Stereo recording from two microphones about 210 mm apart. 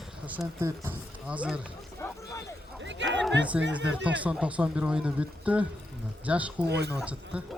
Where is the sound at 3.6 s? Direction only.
55° right (ahead or behind).